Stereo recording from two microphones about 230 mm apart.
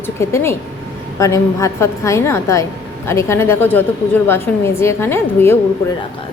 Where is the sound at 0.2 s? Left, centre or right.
Centre.